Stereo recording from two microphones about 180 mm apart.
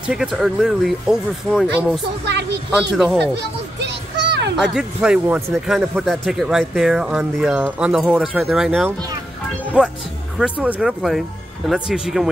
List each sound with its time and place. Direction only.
0.0 s speech: 5° right (ahead or behind)
2.2 s a woman's voice: 70° right (ahead or behind)
3.2 s music: 75° right (ahead or behind)
4.6 s speech: 5° right (ahead or behind)
10.4 s speech: 5° right (ahead or behind)